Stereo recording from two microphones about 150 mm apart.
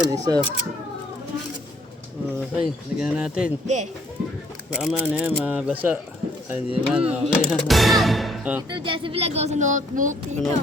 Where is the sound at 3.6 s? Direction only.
50° right (ahead or behind).